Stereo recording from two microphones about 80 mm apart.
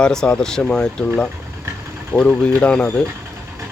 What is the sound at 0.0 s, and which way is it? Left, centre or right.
Speech, centre.